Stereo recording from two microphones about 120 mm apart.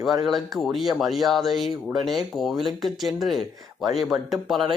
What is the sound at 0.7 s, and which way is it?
Speech, centre (ahead or behind).